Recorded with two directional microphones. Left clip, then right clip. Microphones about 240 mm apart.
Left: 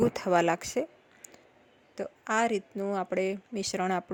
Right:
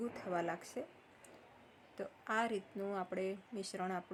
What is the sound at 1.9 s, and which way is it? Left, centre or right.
Speech, left.